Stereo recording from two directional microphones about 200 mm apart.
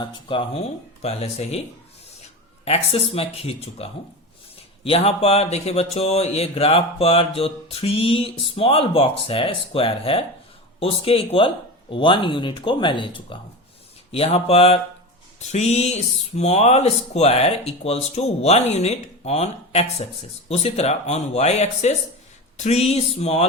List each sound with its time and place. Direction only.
0.0 s speech: 25° left (ahead or behind)
2.6 s speech: 30° left (ahead or behind)